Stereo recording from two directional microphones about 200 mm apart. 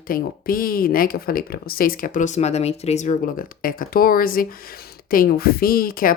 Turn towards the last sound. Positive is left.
turn(degrees=45)  # may be behind; listen again after turning